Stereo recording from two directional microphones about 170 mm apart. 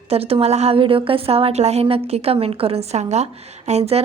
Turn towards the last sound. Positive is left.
turn(degrees=-40)  # may be behind; listen again after turning